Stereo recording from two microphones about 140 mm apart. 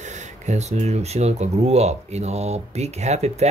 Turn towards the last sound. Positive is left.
turn(degrees=-50)  # may be behind; listen again after turning